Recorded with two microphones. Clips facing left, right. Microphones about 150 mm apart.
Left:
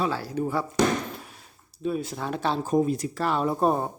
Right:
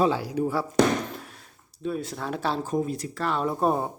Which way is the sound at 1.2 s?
5° left (ahead or behind).